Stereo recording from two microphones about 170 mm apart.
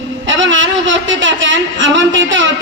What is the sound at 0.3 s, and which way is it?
Speech, 90° right.